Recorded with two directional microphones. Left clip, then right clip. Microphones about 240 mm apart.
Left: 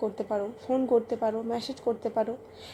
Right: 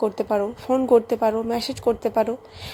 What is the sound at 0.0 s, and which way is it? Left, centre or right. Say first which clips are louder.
A woman's voice: right 8 dB; right.